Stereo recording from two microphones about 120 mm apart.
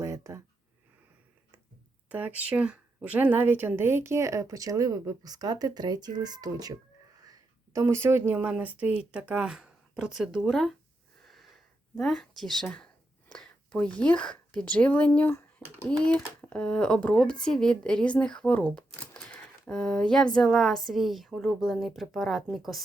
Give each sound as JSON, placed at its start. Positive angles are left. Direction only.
{"t": 0.0, "sound": "a sound", "side_deg": -25}
{"t": 2.0, "sound": "speech", "side_deg": -15}
{"t": 11.9, "sound": "a woman's voice", "side_deg": 0}